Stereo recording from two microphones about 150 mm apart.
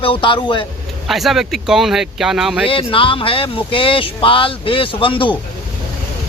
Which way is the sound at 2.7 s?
35° left (ahead or behind).